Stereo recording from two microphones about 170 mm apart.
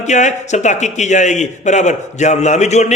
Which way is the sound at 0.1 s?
45° left (ahead or behind).